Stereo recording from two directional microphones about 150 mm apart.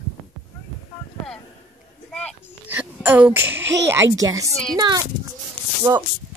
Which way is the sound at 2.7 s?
15° right (ahead or behind).